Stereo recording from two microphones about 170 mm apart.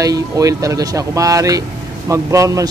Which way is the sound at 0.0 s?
20° right (ahead or behind).